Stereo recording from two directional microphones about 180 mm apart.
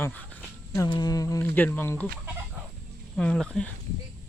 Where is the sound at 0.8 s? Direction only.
20° left (ahead or behind).